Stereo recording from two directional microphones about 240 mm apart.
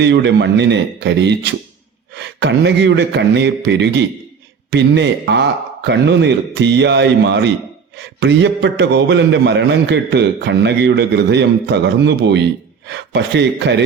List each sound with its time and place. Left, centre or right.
0.0 s a man's voice: right